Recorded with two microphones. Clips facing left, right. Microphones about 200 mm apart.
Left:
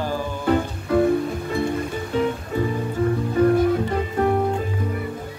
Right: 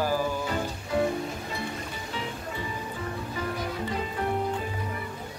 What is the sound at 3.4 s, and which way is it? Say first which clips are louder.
Music: left 16 dB; 55° left (ahead or behind).